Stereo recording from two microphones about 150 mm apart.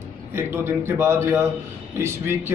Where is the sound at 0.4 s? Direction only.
15° right (ahead or behind).